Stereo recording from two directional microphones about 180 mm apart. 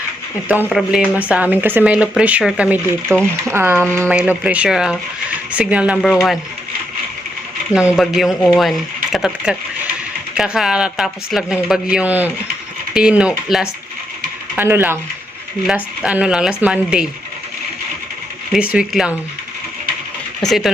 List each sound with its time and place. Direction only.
0.7 s a man's voice: 5° right (ahead or behind)
7.7 s a man's voice: 5° right (ahead or behind)
8.3 s speech: 20° left (ahead or behind)
8.5 s a man's voice: centre (ahead or behind)
18.7 s a man's voice: 5° right (ahead or behind)
20.4 s a man's voice: centre (ahead or behind)